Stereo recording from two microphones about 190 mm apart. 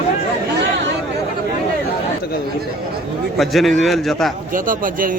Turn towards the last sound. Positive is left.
turn(degrees=-45)  # may be behind; listen again after turning